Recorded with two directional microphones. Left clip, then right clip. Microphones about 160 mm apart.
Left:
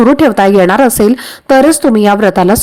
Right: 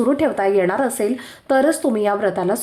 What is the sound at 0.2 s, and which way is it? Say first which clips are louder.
Speech: left 10 dB; 45° left (ahead or behind).